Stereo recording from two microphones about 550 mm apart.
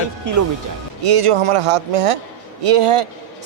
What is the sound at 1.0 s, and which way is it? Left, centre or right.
A man's voice, right.